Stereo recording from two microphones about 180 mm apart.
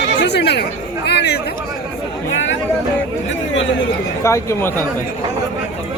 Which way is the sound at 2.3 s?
90° left.